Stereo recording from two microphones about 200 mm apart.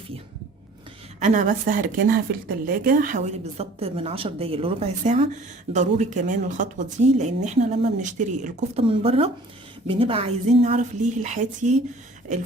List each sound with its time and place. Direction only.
1.2 s a woman's voice: 40° right (ahead or behind)